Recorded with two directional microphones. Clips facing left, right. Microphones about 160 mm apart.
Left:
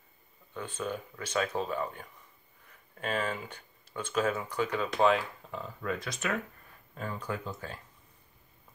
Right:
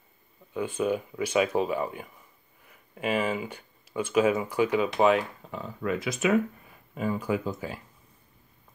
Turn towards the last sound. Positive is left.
turn(degrees=-10)  # may be behind; listen again after turning